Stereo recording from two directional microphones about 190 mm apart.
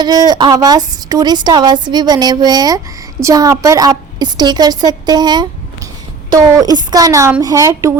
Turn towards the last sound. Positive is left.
turn(degrees=-15)  # may be behind; listen again after turning